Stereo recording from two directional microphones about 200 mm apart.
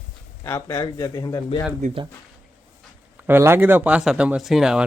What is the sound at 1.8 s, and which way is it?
Speech, 35° right (ahead or behind).